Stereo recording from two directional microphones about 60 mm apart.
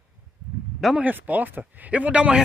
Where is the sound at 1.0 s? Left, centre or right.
Right.